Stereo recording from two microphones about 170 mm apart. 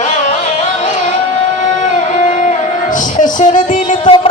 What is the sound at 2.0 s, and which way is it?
Music, 50° left (ahead or behind).